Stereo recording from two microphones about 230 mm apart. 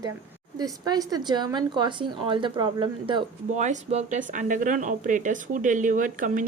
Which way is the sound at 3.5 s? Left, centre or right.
Right.